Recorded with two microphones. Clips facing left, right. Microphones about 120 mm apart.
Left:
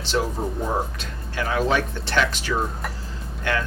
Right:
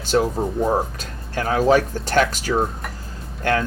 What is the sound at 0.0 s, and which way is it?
Speech, 45° right (ahead or behind).